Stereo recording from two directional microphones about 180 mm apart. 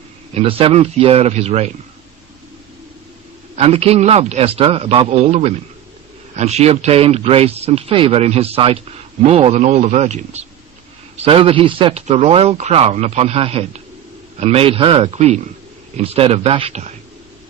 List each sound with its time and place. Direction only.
0.3 s speech: 30° right (ahead or behind)
3.5 s speech: 35° right (ahead or behind)